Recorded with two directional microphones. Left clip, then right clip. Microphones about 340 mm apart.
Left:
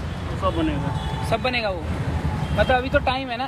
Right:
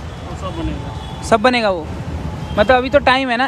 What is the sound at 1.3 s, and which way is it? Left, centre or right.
Speech, right.